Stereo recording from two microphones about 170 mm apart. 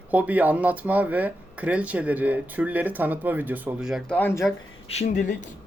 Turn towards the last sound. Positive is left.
turn(degrees=45)  # may be behind; listen again after turning